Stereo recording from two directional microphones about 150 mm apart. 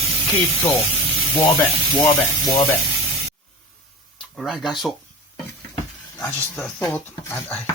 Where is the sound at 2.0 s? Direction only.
25° left (ahead or behind).